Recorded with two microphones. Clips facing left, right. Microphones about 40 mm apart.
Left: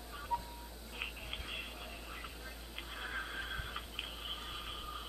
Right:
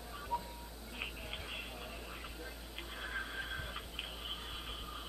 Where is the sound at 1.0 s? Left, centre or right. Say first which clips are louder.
Even; centre.